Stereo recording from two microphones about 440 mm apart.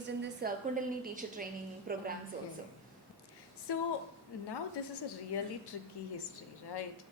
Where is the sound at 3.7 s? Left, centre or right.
Left.